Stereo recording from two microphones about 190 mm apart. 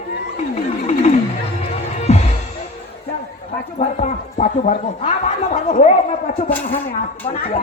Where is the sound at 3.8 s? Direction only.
35° left (ahead or behind).